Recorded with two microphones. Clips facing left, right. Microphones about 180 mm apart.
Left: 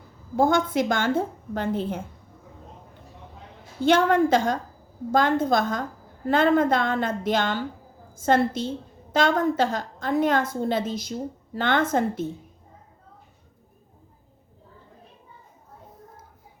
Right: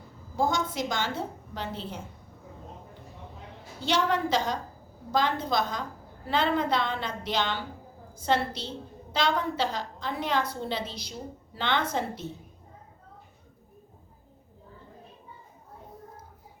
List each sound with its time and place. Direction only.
0.3 s a woman's voice: 55° left (ahead or behind)
3.8 s a woman's voice: 50° left (ahead or behind)